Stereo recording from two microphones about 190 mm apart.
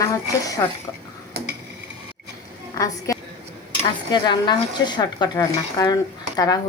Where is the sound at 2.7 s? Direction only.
15° left (ahead or behind).